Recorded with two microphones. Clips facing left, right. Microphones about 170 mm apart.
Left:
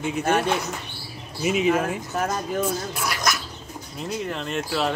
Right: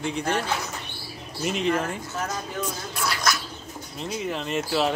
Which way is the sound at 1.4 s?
5° left (ahead or behind).